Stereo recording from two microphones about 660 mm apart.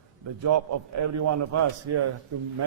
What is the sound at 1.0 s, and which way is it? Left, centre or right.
A man's voice, right.